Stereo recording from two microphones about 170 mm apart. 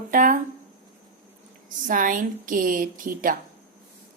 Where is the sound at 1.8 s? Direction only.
50° right (ahead or behind).